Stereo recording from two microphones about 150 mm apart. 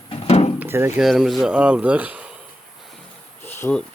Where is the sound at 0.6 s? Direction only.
15° right (ahead or behind).